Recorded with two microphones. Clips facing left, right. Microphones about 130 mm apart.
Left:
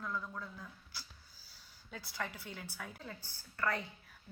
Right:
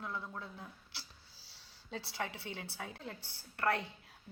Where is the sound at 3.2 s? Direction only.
65° right (ahead or behind).